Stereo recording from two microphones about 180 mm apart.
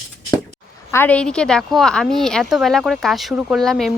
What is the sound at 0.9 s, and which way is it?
A woman's voice, 10° left (ahead or behind).